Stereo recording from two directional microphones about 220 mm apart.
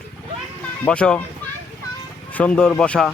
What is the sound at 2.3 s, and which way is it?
Speech, 5° left (ahead or behind).